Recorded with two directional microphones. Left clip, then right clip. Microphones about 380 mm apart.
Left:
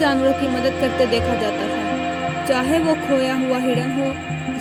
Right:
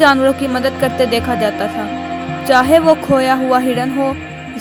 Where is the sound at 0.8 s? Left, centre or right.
Right.